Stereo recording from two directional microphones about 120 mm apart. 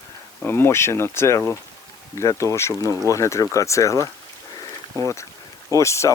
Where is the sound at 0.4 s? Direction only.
20° left (ahead or behind).